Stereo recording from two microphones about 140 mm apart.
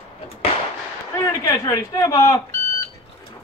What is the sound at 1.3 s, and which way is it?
A man's voice, 25° left (ahead or behind).